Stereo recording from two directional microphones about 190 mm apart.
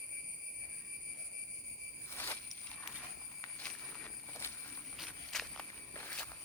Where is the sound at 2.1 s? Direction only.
10° left (ahead or behind).